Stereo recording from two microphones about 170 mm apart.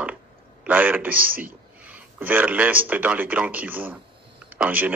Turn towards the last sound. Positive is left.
turn(degrees=-10)  # may be behind; listen again after turning